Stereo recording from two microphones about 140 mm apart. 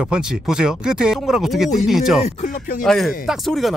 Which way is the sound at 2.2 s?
55° left (ahead or behind).